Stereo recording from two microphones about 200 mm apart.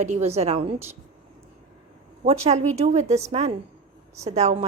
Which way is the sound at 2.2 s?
30° right (ahead or behind).